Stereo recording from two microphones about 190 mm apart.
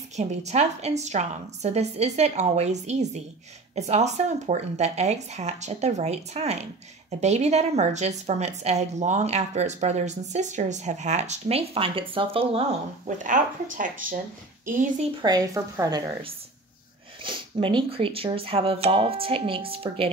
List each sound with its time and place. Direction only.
0.1 s speech: 35° right (ahead or behind)
13.0 s speech: 40° right (ahead or behind)
15.2 s a woman's voice: 20° right (ahead or behind)
17.2 s speech: 25° right (ahead or behind)